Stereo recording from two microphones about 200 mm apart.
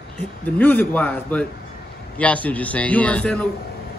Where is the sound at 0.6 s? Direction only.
10° left (ahead or behind).